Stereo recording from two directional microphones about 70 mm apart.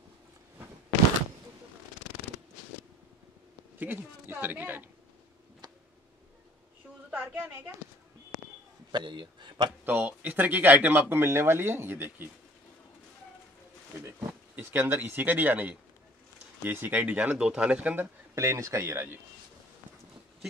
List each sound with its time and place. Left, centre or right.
3.7 s speech: right
5.6 s tick-tock: right
7.1 s a sound: right
8.9 s a man's voice: right
9.8 s speech: right
14.5 s speech: right
18.3 s speech: right